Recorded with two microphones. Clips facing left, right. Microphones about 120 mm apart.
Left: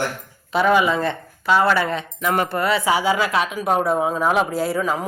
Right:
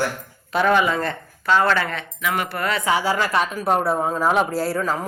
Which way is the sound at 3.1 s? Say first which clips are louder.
Left 1 dB; 5° left (ahead or behind).